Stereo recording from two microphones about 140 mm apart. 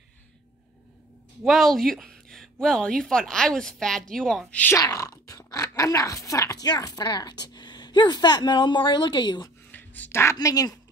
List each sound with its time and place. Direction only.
1.4 s speech: centre (ahead or behind)
4.7 s speech: 25° left (ahead or behind)
9.7 s a sound: 10° left (ahead or behind)
10.3 s speech: 25° left (ahead or behind)